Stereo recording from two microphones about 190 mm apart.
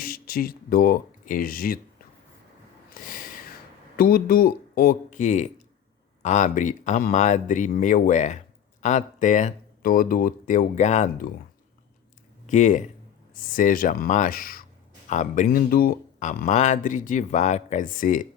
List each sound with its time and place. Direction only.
0.0 s speech: 50° left (ahead or behind)
2.9 s a sound: 45° left (ahead or behind)
3.9 s speech: 50° left (ahead or behind)
12.5 s speech: 40° left (ahead or behind)